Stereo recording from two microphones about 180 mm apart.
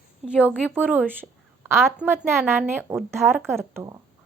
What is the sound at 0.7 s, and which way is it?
A woman's voice, 10° right (ahead or behind).